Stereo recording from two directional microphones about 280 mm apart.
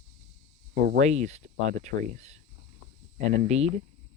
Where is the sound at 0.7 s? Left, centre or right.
Right.